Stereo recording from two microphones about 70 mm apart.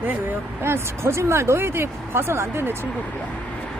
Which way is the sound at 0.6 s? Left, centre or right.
Right.